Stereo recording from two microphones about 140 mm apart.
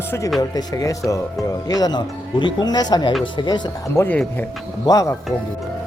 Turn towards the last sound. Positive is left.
turn(degrees=25)  # may be behind; listen again after turning